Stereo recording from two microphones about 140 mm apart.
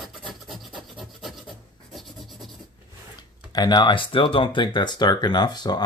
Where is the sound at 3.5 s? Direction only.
30° left (ahead or behind).